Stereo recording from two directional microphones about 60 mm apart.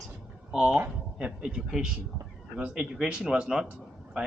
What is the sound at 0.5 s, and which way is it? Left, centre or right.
Speech, centre.